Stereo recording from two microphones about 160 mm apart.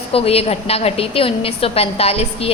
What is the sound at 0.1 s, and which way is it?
A woman's voice, 35° left (ahead or behind).